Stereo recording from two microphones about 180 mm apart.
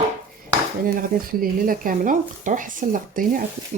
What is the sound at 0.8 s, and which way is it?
Speech, 55° right (ahead or behind).